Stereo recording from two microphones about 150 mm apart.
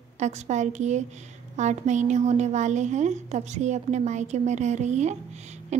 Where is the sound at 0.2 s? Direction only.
50° right (ahead or behind).